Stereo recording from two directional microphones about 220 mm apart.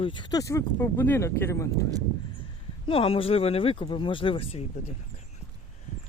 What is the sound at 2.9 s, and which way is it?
Speech, 25° left (ahead or behind).